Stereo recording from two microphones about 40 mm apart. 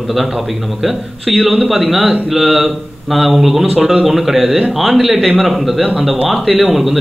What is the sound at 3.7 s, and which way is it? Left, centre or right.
Speech, centre.